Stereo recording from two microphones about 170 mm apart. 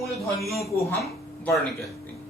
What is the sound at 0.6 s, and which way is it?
Speech, 15° left (ahead or behind).